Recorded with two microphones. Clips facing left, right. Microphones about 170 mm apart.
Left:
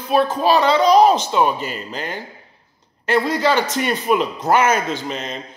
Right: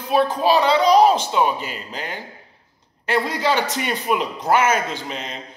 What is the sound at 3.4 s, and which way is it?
A man's voice, 15° right (ahead or behind).